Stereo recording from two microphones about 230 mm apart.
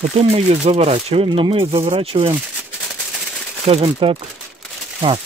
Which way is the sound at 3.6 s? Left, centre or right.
Right.